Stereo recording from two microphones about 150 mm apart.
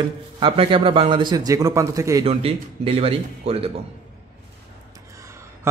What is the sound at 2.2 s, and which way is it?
A man's voice, 40° right (ahead or behind).